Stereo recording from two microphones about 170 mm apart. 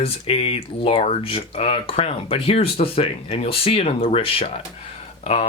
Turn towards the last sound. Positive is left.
turn(degrees=35)  # may be behind; listen again after turning